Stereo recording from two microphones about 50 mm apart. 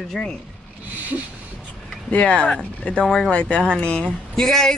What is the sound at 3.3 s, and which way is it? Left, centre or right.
Speech, left.